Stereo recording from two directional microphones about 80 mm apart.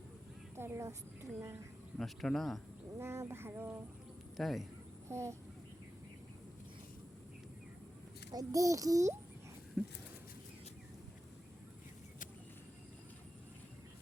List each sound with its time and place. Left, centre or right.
0.5 s a woman's voice: right
2.0 s speech: centre
3.0 s a sound: right
4.4 s speech: centre
5.0 s a woman's voice: right
8.3 s a child's voice: right
9.8 s speech: centre